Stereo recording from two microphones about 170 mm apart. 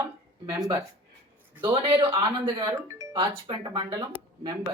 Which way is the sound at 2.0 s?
25° right (ahead or behind).